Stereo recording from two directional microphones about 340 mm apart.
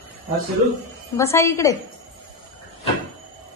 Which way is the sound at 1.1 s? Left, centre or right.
Centre.